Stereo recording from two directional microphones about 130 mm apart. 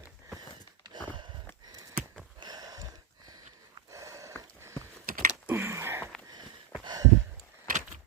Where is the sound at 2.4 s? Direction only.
30° right (ahead or behind).